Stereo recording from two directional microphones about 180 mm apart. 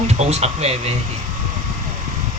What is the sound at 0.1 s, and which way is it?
Speech, 35° right (ahead or behind).